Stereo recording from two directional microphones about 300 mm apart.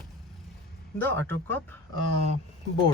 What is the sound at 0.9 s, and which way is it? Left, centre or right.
Speech, centre.